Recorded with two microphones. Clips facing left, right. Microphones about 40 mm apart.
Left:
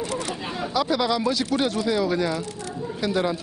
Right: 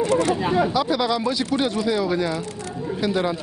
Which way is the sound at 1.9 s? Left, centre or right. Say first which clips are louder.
Right 1 dB; centre.